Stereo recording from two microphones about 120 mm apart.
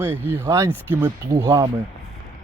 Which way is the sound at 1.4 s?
30° right (ahead or behind).